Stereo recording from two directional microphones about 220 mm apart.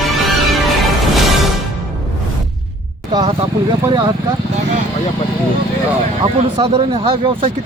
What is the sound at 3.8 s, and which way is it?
Speech, 15° right (ahead or behind).